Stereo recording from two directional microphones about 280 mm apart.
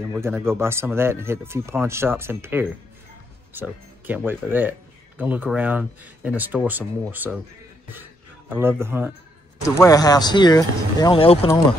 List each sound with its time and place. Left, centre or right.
0.1 s a man's voice: centre
9.8 s speech: centre